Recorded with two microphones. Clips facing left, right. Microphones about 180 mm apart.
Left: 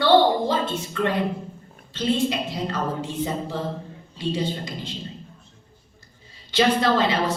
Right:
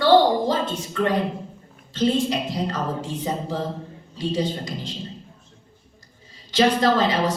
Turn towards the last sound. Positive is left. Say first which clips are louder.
# right 1 dB
turn(degrees=-40)  # may be behind; listen again after turning